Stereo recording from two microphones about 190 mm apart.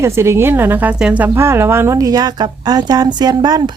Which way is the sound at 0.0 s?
15° right (ahead or behind).